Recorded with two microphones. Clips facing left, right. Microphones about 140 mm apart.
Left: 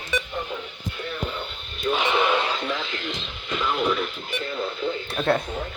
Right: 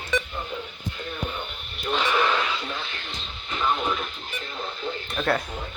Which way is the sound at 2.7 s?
90° left.